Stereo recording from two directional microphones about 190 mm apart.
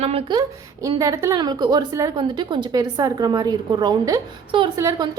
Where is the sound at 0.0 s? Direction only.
30° right (ahead or behind).